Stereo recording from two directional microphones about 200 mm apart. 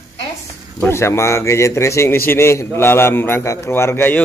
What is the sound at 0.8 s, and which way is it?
A man's voice, 15° left (ahead or behind).